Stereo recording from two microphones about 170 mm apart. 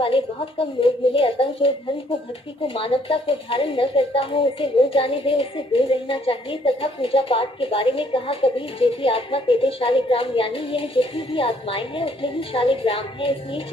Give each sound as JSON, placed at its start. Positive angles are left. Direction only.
{"t": 0.0, "sound": "a woman's voice", "side_deg": 30}